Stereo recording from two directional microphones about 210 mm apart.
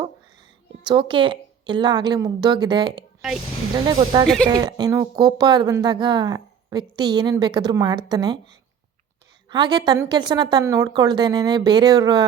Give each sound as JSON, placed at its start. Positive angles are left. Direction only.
{"t": 0.9, "sound": "a woman's voice", "side_deg": -25}
{"t": 3.2, "sound": "speech", "side_deg": 0}
{"t": 3.8, "sound": "a woman's voice", "side_deg": -20}